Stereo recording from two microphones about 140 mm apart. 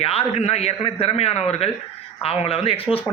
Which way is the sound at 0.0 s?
45° left (ahead or behind).